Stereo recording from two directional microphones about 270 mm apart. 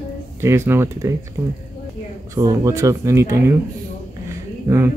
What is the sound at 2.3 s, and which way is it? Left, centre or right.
Speech, centre.